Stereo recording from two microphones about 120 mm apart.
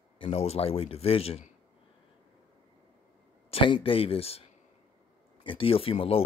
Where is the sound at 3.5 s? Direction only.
45° left (ahead or behind).